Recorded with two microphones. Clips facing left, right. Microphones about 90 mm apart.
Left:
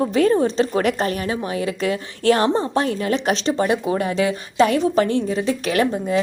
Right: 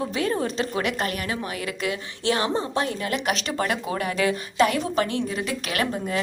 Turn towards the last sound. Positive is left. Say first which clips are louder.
# left 7 dB
turn(degrees=30)  # may be behind; listen again after turning